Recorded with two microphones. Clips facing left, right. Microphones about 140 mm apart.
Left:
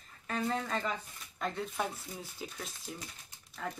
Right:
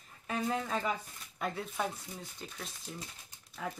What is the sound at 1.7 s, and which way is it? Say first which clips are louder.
Speech: even; 5° left (ahead or behind).